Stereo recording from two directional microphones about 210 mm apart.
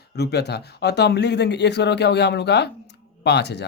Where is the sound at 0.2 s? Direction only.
50° left (ahead or behind).